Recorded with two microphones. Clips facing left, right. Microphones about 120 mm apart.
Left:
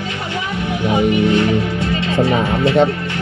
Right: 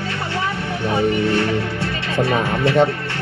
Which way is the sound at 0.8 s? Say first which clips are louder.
Left 3 dB; 15° left (ahead or behind).